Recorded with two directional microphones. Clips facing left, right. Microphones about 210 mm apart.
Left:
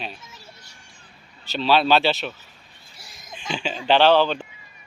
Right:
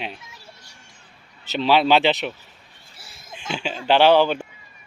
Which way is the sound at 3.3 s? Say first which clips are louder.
Even; 10° right (ahead or behind).